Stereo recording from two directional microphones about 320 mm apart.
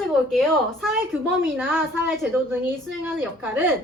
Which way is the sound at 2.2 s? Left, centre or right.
Centre.